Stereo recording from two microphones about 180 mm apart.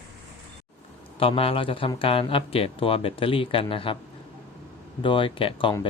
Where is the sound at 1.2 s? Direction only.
30° left (ahead or behind).